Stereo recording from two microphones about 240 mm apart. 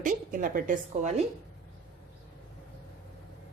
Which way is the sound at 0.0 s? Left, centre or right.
Right.